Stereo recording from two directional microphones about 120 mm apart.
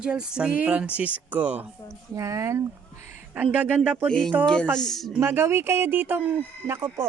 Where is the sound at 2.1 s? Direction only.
25° right (ahead or behind).